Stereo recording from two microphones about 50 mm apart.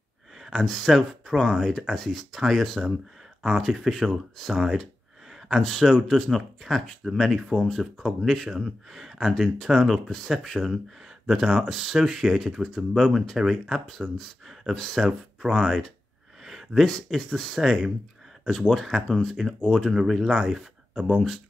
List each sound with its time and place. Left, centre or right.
0.4 s speech: centre
5.6 s speech: centre
17.6 s speech: centre
18.9 s speech: centre
19.3 s speech: centre